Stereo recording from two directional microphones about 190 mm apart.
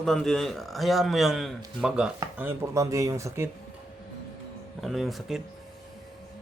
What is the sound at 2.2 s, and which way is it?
Chopping, 15° right (ahead or behind).